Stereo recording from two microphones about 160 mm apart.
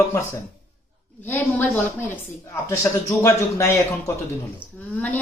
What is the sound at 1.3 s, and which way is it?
A woman's voice, 10° left (ahead or behind).